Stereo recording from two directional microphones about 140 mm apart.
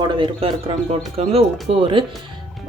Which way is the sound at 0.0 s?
35° right (ahead or behind).